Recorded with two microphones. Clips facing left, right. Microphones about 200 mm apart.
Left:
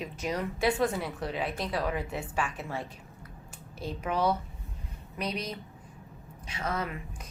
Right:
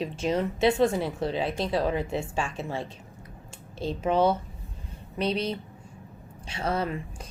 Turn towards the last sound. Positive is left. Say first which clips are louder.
# right 5 dB
turn(degrees=-30)  # may be behind; listen again after turning